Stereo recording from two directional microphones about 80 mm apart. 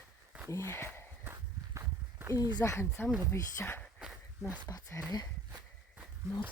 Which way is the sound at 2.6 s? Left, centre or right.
Left.